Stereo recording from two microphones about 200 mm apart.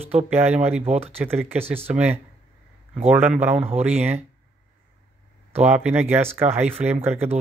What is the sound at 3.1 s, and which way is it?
Speech, 10° right (ahead or behind).